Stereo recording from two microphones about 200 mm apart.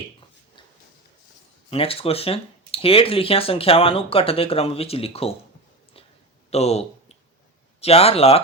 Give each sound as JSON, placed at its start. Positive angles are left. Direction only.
{"t": 1.7, "sound": "speech", "side_deg": 30}
{"t": 6.5, "sound": "speech", "side_deg": 30}